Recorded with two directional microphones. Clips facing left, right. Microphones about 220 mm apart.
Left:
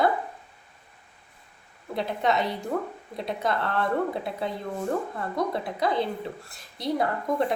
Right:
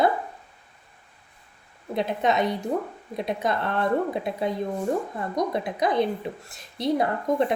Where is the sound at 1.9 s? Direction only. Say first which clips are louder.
Right 2 dB; 20° right (ahead or behind).